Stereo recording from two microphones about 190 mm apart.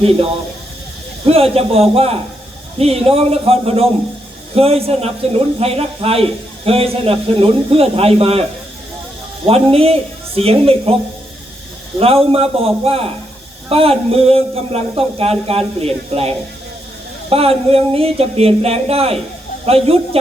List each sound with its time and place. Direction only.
1.2 s speech: 30° right (ahead or behind)
9.5 s speech: 30° right (ahead or behind)
11.9 s speech: 30° right (ahead or behind)